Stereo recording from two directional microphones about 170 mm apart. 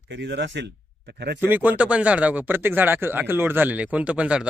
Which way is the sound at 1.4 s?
10° right (ahead or behind).